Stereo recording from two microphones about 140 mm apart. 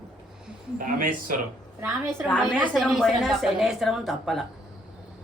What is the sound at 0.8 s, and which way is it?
Speech, 80° right.